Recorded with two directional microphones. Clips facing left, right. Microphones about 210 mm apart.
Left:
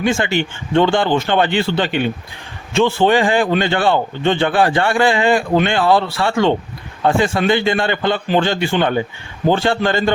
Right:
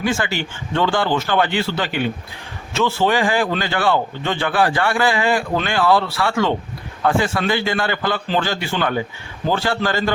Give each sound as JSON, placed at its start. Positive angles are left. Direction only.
{"t": 0.0, "sound": "a man's voice", "side_deg": 25}